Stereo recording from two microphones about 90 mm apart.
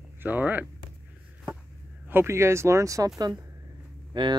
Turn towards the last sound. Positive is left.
turn(degrees=-65)  # may be behind; listen again after turning